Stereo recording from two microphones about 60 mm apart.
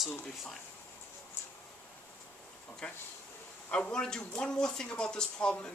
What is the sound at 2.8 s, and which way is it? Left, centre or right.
Speech, centre.